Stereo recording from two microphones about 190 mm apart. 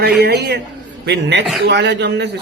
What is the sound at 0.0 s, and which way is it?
Speech, 60° right (ahead or behind).